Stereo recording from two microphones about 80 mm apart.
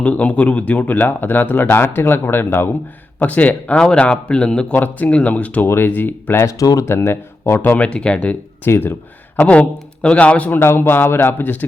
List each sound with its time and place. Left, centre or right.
0.0 s speech: centre
6.4 s speech: left
6.8 s speech: left
7.9 s speech: centre
10.6 s speech: left